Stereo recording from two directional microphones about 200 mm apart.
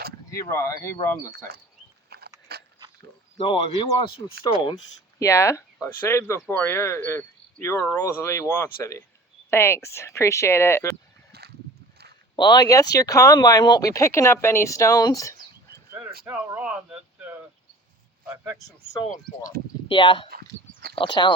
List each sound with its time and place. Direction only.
0.3 s speech: 15° left (ahead or behind)
2.0 s biting: 50° right (ahead or behind)
3.3 s speech: 25° left (ahead or behind)
5.2 s speech: 15° left (ahead or behind)
11.3 s boat: 55° right (ahead or behind)
12.4 s speech: 20° left (ahead or behind)
15.9 s a sound: 10° right (ahead or behind)
16.2 s a man's voice: 10° right (ahead or behind)
19.9 s speech: 25° left (ahead or behind)